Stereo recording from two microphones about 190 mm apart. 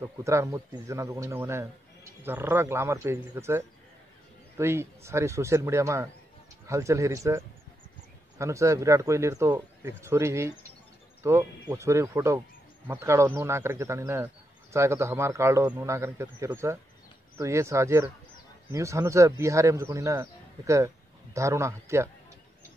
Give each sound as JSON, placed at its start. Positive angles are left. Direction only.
{"t": 0.0, "sound": "speech", "side_deg": -15}